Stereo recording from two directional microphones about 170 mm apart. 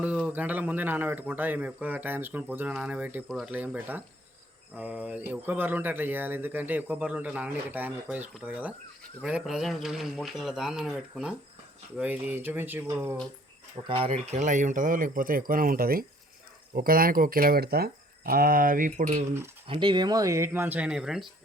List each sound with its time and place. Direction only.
0.0 s speech: 10° right (ahead or behind)
3.2 s speech: centre (ahead or behind)
3.5 s speech: 10° right (ahead or behind)
13.8 s speech: 35° right (ahead or behind); by 19.2 s 50° right (ahead or behind)
19.6 s speech: 30° right (ahead or behind); by 21.2 s 5° right (ahead or behind)